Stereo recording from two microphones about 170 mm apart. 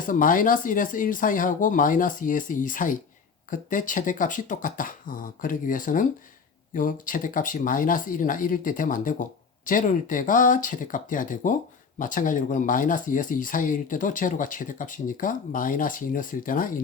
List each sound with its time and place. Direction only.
0.0 s speech: 50° left (ahead or behind)